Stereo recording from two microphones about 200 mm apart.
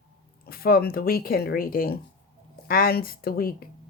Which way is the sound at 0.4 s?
50° left (ahead or behind).